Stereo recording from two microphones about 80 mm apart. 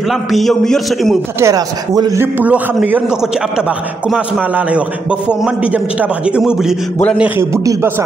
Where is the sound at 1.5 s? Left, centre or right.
Right.